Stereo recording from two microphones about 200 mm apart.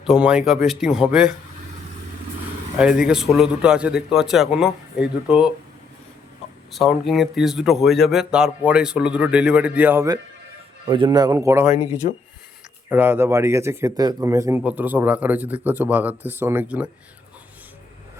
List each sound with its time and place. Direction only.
0.0 s speech: 5° right (ahead or behind)
2.7 s speech: 5° right (ahead or behind)
6.7 s speech: centre (ahead or behind)
10.8 s a man's voice: 25° right (ahead or behind)
12.0 s speech: 40° left (ahead or behind)
12.9 s speech: 10° right (ahead or behind)